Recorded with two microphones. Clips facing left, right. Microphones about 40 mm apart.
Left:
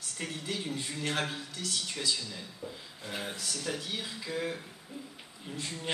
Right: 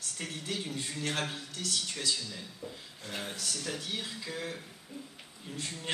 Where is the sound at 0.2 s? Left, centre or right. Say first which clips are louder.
Left 1 dB; centre.